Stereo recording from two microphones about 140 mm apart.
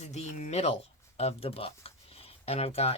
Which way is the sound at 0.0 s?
55° left (ahead or behind).